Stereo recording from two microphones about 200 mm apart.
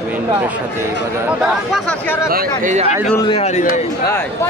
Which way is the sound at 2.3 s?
50° right (ahead or behind).